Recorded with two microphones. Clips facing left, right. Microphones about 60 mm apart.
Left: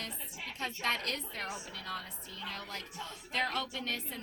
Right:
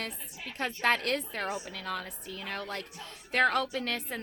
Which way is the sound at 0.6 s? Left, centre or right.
Right.